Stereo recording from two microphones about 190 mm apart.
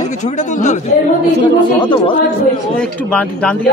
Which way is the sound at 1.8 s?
25° left (ahead or behind).